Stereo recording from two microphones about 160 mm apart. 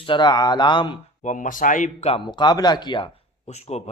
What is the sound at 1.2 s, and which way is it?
Speech, 50° left (ahead or behind).